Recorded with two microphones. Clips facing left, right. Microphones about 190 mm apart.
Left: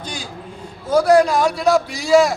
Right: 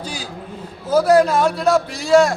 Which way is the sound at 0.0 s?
5° right (ahead or behind).